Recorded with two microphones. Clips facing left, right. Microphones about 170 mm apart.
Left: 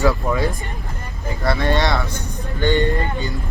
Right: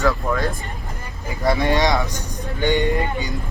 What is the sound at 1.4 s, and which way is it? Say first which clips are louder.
Speech: right 1 dB; 15° right (ahead or behind).